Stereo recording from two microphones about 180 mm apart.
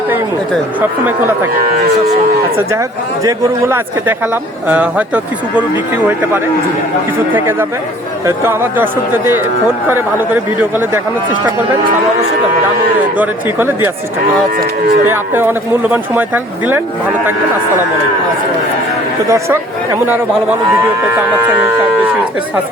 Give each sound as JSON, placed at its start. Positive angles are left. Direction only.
{"t": 3.2, "sound": "speech", "side_deg": -15}
{"t": 7.3, "sound": "speech", "side_deg": -10}
{"t": 13.1, "sound": "speech", "side_deg": -10}
{"t": 15.0, "sound": "speech", "side_deg": -10}
{"t": 19.3, "sound": "speech", "side_deg": -15}